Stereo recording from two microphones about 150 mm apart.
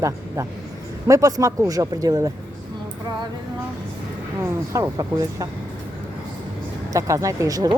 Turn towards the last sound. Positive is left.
turn(degrees=-25)  # may be behind; listen again after turning